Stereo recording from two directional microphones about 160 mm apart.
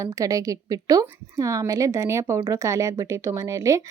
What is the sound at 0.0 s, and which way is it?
A woman's voice, 20° right (ahead or behind).